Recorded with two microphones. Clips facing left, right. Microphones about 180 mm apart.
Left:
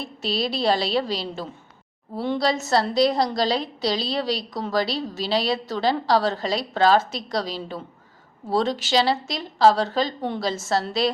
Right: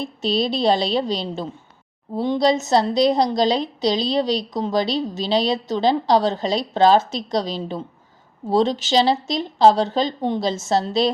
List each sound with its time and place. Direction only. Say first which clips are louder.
0.0 s a woman's voice: right 5 dB; 20° right (ahead or behind)
8.4 s a woman's voice: right 4 dB; 25° right (ahead or behind)